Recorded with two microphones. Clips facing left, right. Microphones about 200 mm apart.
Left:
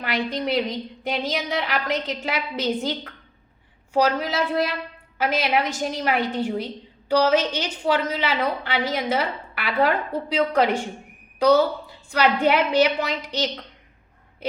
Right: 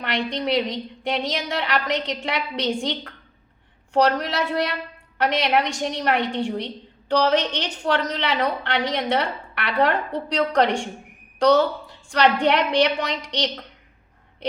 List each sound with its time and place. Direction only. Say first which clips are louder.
0.0 s a woman's voice: even; 5° left (ahead or behind)